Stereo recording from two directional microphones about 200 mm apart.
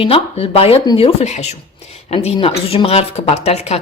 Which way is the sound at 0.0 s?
30° left (ahead or behind).